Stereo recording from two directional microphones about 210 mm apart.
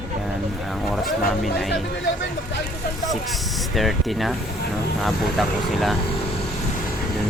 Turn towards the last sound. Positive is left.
turn(degrees=0)  # may be behind; listen again after turning